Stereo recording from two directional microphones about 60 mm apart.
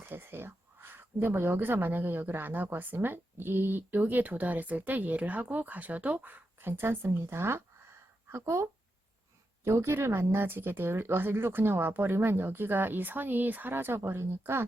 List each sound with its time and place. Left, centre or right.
0.0 s speech: right
9.6 s speech: right